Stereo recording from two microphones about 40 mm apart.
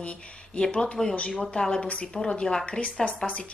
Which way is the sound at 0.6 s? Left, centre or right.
Centre.